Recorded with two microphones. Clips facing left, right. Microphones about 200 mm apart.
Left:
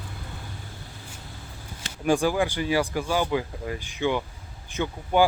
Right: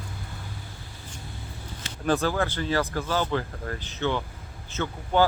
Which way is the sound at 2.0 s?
15° left (ahead or behind).